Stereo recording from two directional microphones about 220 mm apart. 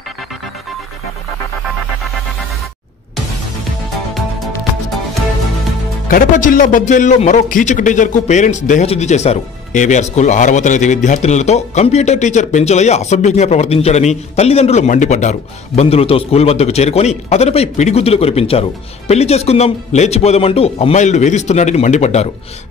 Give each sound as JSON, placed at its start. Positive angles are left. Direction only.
{"t": 6.0, "sound": "speech", "side_deg": 40}